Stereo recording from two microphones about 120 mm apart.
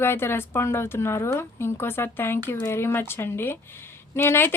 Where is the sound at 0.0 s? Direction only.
20° left (ahead or behind).